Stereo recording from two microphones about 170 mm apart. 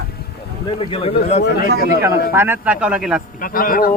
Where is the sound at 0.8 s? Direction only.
35° left (ahead or behind).